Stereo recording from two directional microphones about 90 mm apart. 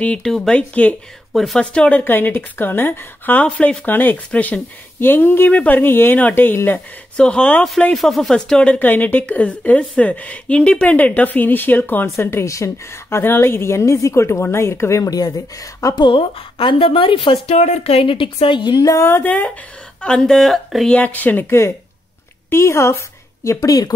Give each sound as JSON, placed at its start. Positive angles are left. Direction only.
{"t": 0.0, "sound": "speech", "side_deg": 10}
{"t": 1.3, "sound": "a woman's voice", "side_deg": 5}
{"t": 7.2, "sound": "speech", "side_deg": 10}
{"t": 7.9, "sound": "a woman's voice", "side_deg": 0}
{"t": 16.0, "sound": "a woman's voice", "side_deg": 70}
{"t": 18.9, "sound": "a woman's voice", "side_deg": 30}
{"t": 20.9, "sound": "a woman's voice", "side_deg": 15}